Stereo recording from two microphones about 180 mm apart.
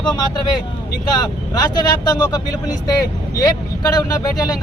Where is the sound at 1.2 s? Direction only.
20° left (ahead or behind).